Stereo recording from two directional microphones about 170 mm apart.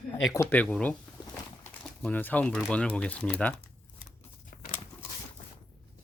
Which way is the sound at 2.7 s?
5° left (ahead or behind).